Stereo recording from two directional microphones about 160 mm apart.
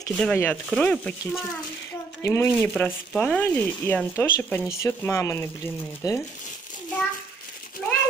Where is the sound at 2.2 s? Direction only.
15° left (ahead or behind).